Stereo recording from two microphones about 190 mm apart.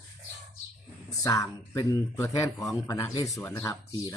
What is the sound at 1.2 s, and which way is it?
Speech, 20° left (ahead or behind).